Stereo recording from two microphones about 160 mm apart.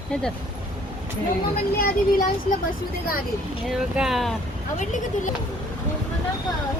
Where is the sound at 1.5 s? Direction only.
70° left (ahead or behind).